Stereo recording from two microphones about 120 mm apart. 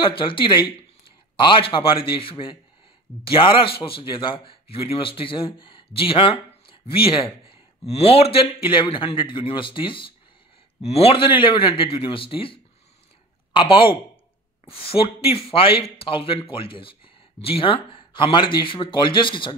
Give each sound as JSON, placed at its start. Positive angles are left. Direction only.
{"t": 0.0, "sound": "a man's voice", "side_deg": 45}
{"t": 10.8, "sound": "a man's voice", "side_deg": 60}